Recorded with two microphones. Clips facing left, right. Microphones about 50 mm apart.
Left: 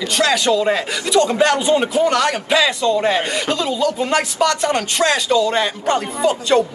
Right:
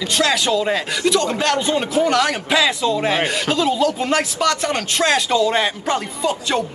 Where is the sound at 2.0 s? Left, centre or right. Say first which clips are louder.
Left 1 dB; centre.